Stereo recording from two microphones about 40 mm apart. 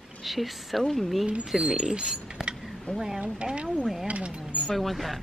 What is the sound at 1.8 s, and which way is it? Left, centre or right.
Speech, centre.